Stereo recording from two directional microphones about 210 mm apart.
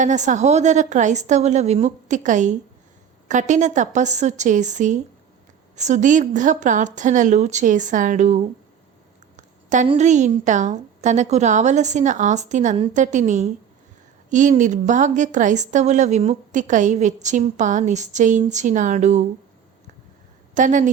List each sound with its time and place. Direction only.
0.0 s a woman's voice: 35° right (ahead or behind)
20.5 s speech: 35° right (ahead or behind)